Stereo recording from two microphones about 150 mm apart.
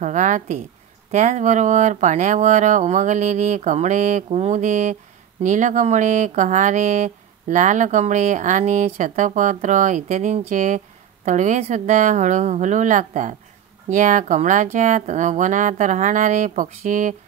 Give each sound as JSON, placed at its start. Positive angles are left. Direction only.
{"t": 0.0, "sound": "speech", "side_deg": -55}